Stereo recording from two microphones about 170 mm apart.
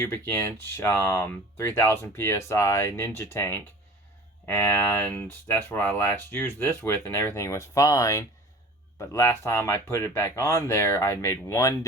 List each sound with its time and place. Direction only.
0.0 s speech: 15° left (ahead or behind)